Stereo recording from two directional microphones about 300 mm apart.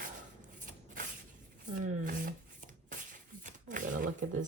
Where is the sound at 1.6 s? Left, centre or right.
Right.